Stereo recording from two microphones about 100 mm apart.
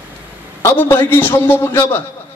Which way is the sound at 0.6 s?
25° left (ahead or behind).